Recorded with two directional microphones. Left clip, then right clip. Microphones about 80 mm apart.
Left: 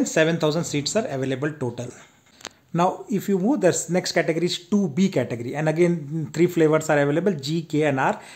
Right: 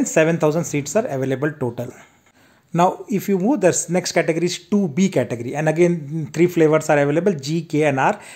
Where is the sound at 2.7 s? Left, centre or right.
Right.